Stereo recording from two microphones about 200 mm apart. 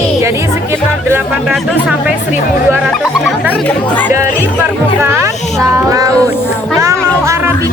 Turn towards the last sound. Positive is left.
turn(degrees=-15)  # may be behind; listen again after turning